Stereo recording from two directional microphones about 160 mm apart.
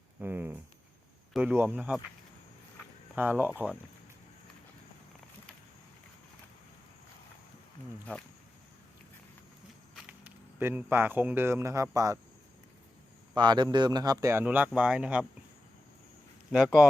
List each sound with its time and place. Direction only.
0.2 s speech: 10° right (ahead or behind)
3.2 s speech: 10° right (ahead or behind)
8.1 s speech: 5° left (ahead or behind)
10.1 s speech: 10° right (ahead or behind)
13.3 s a man's voice: 25° right (ahead or behind); by 15.3 s 5° right (ahead or behind)
16.5 s speech: centre (ahead or behind)